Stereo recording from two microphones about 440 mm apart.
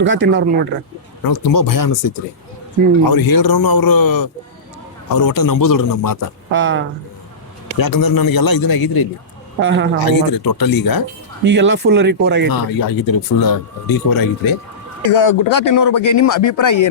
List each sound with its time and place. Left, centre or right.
0.0 s speech: right
1.3 s speech: left
6.5 s speech: right
7.8 s speech: left
9.6 s speech: right
10.0 s speech: left
11.4 s speech: right
12.5 s speech: left